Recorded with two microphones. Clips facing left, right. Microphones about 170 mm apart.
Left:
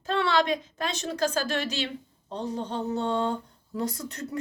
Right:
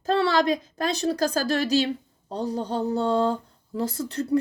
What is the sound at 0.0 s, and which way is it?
A woman's voice, 40° right (ahead or behind).